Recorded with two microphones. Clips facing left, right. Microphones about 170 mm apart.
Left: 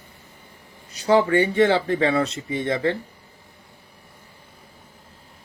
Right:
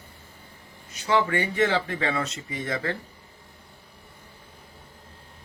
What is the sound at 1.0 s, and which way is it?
Speech, 35° left (ahead or behind).